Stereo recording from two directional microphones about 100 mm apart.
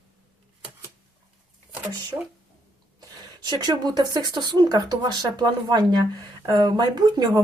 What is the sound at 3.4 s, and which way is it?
Speech, 45° right (ahead or behind).